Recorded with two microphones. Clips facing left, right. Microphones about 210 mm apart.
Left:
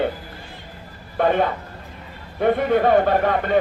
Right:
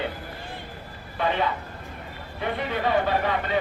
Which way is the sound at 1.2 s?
50° left (ahead or behind).